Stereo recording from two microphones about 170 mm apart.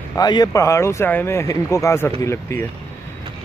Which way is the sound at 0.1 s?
25° left (ahead or behind).